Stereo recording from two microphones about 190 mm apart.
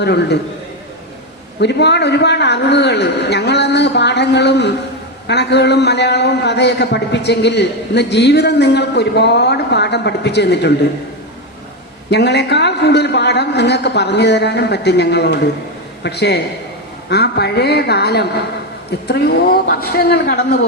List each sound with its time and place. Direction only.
0.0 s a man's voice: 60° left (ahead or behind)
1.6 s a man's voice: 65° left (ahead or behind)
12.1 s a man's voice: 60° left (ahead or behind)